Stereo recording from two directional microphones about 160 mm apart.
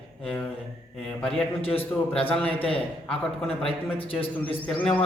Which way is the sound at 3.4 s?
35° left (ahead or behind).